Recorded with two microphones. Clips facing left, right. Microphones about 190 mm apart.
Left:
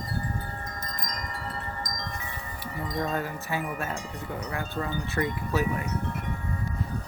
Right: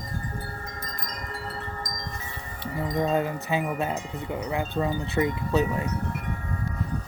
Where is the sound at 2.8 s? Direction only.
25° right (ahead or behind).